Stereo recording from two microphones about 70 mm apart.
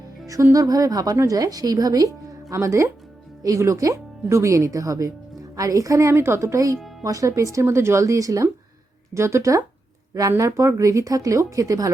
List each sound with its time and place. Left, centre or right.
0.5 s a woman's voice: right
2.5 s speech: right